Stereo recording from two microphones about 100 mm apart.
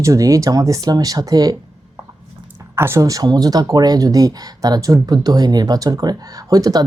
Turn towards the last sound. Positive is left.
turn(degrees=-40)  # may be behind; listen again after turning